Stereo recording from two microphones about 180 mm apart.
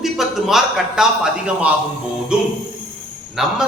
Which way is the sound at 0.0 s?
Centre (ahead or behind).